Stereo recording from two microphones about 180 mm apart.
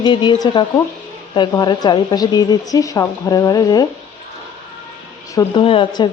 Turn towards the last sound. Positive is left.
turn(degrees=30)  # may be behind; listen again after turning